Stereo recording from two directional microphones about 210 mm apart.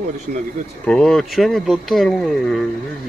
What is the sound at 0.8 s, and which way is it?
Speech, 5° left (ahead or behind).